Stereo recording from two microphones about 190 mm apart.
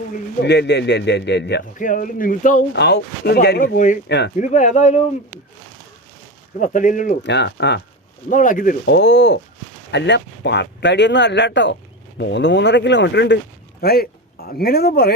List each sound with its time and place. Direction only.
0.4 s a man's voice: 65° left (ahead or behind)
1.8 s speech: 45° left (ahead or behind)
2.7 s a man's voice: 60° left (ahead or behind); by 5.0 s 40° left (ahead or behind)
6.6 s speech: 40° left (ahead or behind)
7.3 s a man's voice: 65° left (ahead or behind)
8.3 s speech: 45° left (ahead or behind)
8.9 s a man's voice: 65° left (ahead or behind)
13.8 s speech: 55° left (ahead or behind)